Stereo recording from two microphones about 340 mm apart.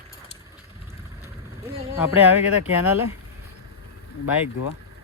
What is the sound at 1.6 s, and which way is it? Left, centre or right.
Speech, centre.